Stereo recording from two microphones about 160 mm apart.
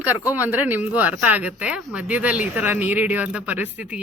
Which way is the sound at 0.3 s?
10° right (ahead or behind).